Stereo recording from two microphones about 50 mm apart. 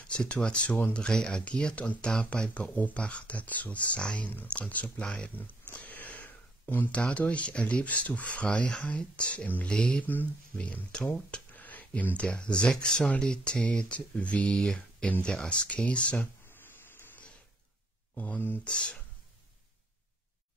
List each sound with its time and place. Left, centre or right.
0.1 s speech: left
1.0 s speech: centre
5.0 s speech: centre
5.8 s a sound: left
6.9 s speech: left
11.5 s a sound: left
12.2 s speech: left
18.1 s speech: left
18.6 s speech: centre